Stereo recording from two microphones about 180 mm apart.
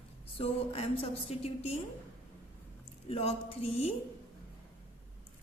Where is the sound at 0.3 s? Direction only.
35° left (ahead or behind).